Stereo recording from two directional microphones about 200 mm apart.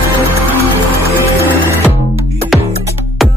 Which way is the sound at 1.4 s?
10° right (ahead or behind).